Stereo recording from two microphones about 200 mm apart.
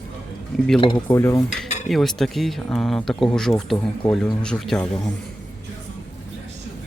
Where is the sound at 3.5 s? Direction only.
15° left (ahead or behind).